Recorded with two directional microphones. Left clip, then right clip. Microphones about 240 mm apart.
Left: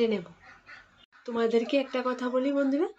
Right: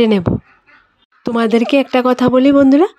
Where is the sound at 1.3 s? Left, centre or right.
Right.